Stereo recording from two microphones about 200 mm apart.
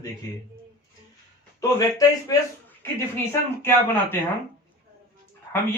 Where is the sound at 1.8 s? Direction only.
20° left (ahead or behind).